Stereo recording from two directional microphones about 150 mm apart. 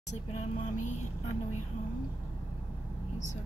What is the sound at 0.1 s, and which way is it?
Speech, 50° left (ahead or behind).